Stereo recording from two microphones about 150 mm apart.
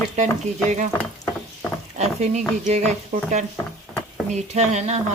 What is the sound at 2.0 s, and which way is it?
Speech, 45° right (ahead or behind).